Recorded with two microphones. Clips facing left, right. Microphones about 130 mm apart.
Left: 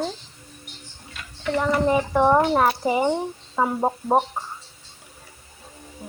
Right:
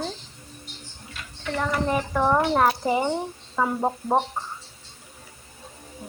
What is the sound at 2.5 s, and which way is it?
Speech, 5° left (ahead or behind).